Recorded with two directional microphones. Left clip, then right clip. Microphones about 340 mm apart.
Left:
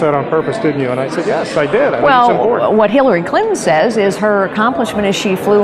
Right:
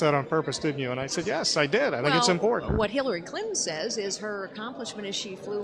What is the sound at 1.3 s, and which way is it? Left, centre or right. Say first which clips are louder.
Speech: left 10 dB; right.